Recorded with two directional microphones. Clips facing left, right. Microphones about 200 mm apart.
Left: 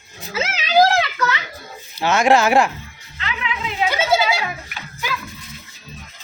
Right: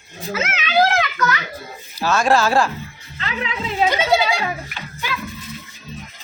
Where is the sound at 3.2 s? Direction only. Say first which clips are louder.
Right 1 dB; 35° right (ahead or behind).